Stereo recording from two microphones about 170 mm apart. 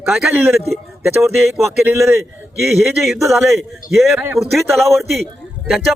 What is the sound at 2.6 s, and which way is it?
Speech, centre (ahead or behind).